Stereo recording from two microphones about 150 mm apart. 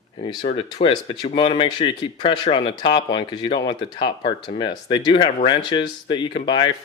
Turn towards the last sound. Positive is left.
turn(degrees=30)  # may be behind; listen again after turning